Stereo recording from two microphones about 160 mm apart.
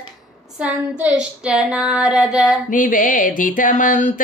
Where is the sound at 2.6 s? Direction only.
55° left (ahead or behind).